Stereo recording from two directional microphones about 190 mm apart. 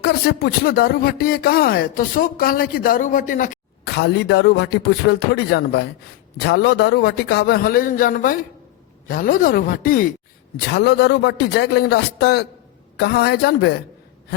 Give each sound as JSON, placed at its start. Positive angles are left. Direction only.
{"t": 0.0, "sound": "speech", "side_deg": 55}
{"t": 3.8, "sound": "a man's voice", "side_deg": 60}
{"t": 10.7, "sound": "a man's voice", "side_deg": 60}